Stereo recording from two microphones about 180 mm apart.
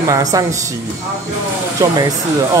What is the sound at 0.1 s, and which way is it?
Speech, 20° right (ahead or behind).